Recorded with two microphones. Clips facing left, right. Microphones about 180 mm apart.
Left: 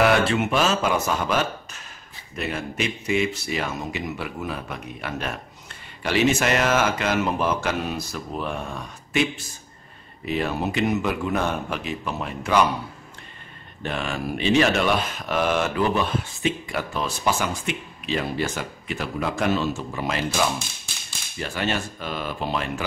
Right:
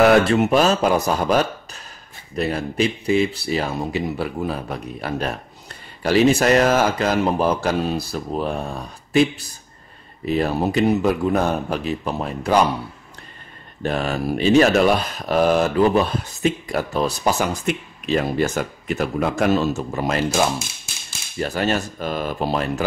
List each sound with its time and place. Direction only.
0.0 s speech: 40° right (ahead or behind)
13.8 s speech: 40° right (ahead or behind)